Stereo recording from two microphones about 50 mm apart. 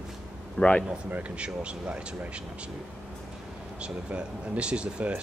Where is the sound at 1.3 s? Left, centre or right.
Right.